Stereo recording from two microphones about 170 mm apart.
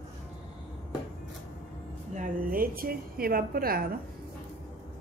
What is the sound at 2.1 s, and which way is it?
A woman's voice, 55° right (ahead or behind).